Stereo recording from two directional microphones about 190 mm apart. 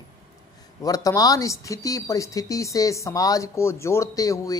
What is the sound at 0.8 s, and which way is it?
Speech, 20° left (ahead or behind).